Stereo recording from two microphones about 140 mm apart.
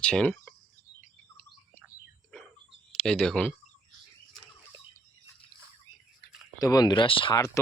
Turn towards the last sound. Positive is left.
turn(degrees=35)  # may be behind; listen again after turning